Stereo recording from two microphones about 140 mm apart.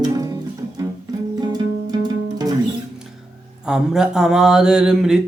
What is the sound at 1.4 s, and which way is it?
Music, 30° right (ahead or behind).